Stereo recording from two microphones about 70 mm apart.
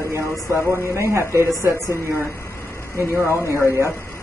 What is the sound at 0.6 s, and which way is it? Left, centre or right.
Speech, right.